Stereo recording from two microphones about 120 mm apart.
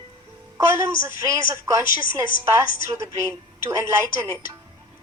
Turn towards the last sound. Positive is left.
turn(degrees=-20)  # may be behind; listen again after turning